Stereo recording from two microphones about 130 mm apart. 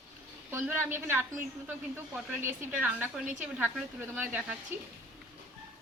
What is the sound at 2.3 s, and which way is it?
A woman's voice, 15° right (ahead or behind).